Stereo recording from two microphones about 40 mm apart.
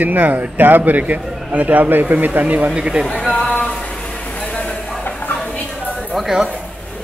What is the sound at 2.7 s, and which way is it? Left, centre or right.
Speech, right.